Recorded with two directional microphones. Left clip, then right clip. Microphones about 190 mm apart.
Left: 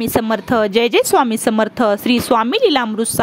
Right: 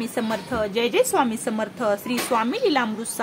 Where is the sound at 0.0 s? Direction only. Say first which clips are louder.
Left 9 dB; 50° left (ahead or behind).